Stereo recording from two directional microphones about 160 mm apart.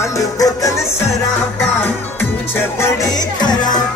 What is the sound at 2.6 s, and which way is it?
Music, 15° left (ahead or behind).